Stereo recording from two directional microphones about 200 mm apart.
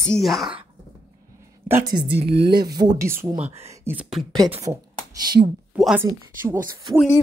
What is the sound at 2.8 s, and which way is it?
Speech, 15° right (ahead or behind).